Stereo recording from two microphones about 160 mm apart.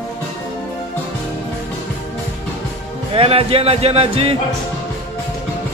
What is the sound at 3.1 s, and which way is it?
Speech, 35° right (ahead or behind).